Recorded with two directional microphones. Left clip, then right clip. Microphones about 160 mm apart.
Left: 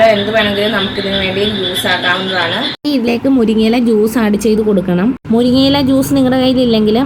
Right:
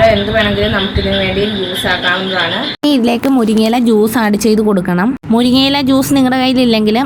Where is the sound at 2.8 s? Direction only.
20° right (ahead or behind).